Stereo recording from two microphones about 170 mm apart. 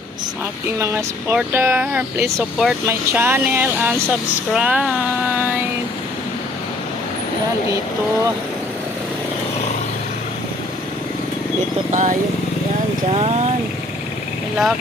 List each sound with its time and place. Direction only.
0.8 s speech: 10° right (ahead or behind)
11.9 s speech: 45° right (ahead or behind)